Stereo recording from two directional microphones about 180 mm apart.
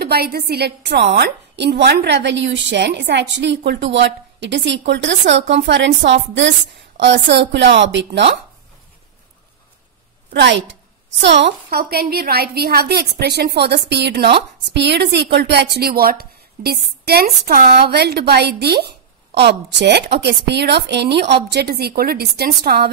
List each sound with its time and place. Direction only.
0.0 s a woman's voice: 60° right (ahead or behind); by 6.5 s 85° right
7.0 s a woman's voice: 75° right (ahead or behind)
10.3 s a woman's voice: 80° right
11.8 s a woman's voice: 60° right (ahead or behind)